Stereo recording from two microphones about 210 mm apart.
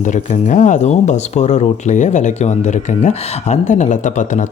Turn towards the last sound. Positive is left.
turn(degrees=35)  # may be behind; listen again after turning